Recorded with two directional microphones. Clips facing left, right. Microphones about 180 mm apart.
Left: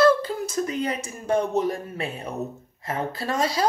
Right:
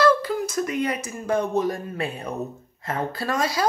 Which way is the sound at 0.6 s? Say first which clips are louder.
Right 2 dB; 30° left (ahead or behind).